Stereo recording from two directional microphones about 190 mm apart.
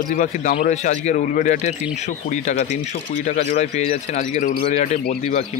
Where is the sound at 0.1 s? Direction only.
40° left (ahead or behind).